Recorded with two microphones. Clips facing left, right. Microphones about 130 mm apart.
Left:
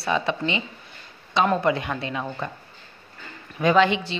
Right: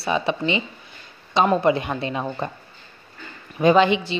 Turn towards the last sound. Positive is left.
turn(degrees=-20)  # may be behind; listen again after turning